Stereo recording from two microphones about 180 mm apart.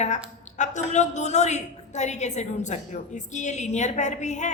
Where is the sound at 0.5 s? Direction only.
40° left (ahead or behind).